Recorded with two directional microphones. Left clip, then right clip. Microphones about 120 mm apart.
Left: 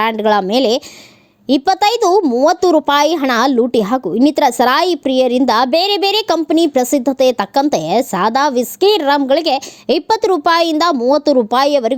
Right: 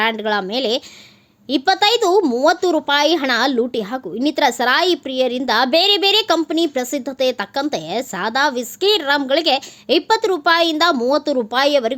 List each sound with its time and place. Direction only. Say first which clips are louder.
0.0 s a woman's voice: left 5 dB; 45° left (ahead or behind)